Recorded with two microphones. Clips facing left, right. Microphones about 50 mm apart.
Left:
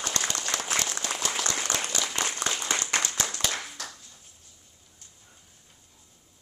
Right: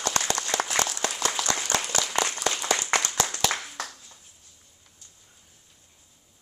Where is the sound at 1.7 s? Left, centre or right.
Right.